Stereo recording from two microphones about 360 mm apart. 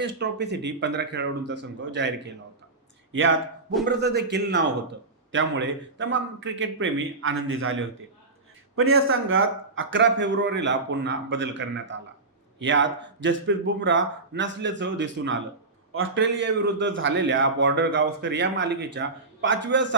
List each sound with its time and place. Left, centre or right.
0.0 s a man's voice: right